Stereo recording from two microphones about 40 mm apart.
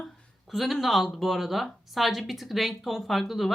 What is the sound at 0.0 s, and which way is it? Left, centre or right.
Speech, centre.